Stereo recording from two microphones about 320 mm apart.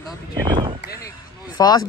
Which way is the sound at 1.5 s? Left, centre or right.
Centre.